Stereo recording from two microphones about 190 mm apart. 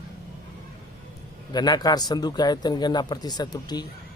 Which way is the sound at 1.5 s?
20° left (ahead or behind).